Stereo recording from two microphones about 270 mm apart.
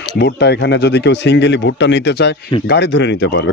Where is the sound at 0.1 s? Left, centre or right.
Left.